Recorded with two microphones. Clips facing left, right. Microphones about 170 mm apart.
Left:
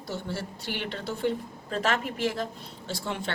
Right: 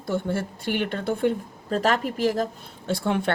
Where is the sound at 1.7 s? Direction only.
40° right (ahead or behind); by 3.3 s 55° right (ahead or behind).